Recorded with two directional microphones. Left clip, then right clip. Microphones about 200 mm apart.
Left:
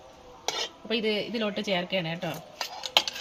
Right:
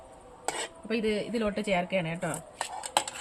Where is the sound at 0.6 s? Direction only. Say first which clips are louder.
Left 2 dB; 10° right (ahead or behind).